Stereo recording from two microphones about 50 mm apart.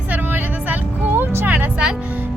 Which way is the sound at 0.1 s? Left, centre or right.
Right.